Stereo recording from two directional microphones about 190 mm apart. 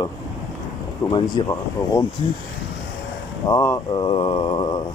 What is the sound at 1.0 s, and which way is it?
Speech, 25° left (ahead or behind).